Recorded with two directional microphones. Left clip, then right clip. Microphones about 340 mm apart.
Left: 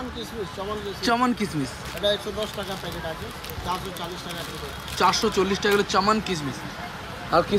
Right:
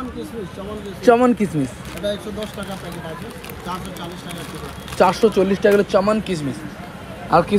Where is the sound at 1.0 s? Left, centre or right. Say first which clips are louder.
Right 9 dB; centre.